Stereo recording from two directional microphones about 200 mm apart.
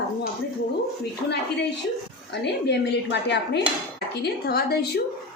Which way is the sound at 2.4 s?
60° left (ahead or behind).